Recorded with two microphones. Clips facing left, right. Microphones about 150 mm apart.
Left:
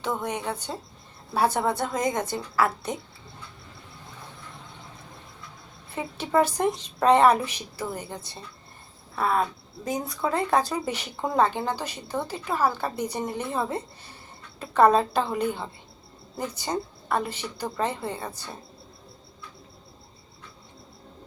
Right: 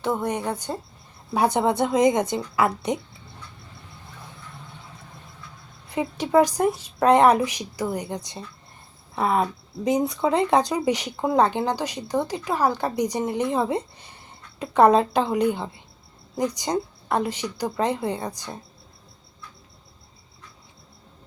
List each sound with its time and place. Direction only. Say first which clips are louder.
0.0 s a woman's voice: right 4 dB; 10° right (ahead or behind)
5.9 s speech: right 5 dB; 15° right (ahead or behind)